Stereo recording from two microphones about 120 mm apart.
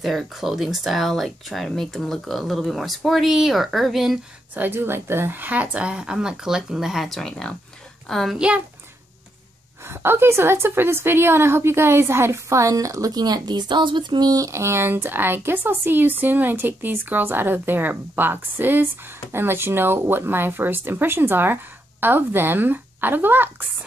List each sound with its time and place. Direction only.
0.0 s speech: centre (ahead or behind)
4.6 s speech: 20° right (ahead or behind); by 8.4 s centre (ahead or behind)
8.4 s speech: 10° right (ahead or behind)
9.8 s a woman's voice: 20° right (ahead or behind)